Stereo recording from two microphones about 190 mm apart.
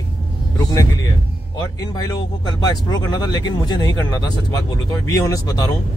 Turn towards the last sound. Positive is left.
turn(degrees=20)  # may be behind; listen again after turning